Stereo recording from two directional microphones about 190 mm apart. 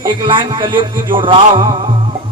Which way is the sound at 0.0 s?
25° right (ahead or behind).